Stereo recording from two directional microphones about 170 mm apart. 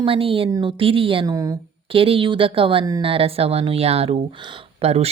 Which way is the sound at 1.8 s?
30° right (ahead or behind).